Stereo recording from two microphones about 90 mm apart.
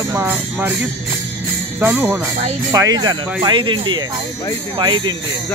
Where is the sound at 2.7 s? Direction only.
45° right (ahead or behind).